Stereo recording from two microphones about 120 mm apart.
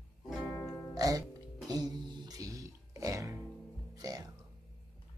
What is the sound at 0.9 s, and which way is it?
Music, 30° right (ahead or behind).